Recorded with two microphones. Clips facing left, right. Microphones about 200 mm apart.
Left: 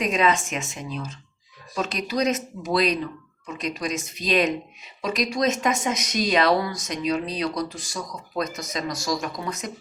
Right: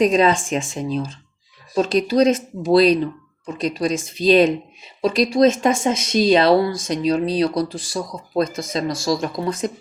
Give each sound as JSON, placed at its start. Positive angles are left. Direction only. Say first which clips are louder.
{"t": 0.0, "sound": "speech", "louder": "right 7 dB", "side_deg": -35}